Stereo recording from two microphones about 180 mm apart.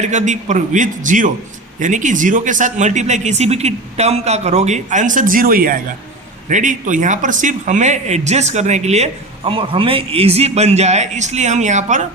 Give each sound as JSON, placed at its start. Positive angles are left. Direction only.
{"t": 0.0, "sound": "speech", "side_deg": -40}